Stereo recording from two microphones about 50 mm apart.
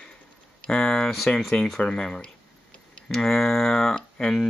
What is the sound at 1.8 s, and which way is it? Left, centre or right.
Speech, centre.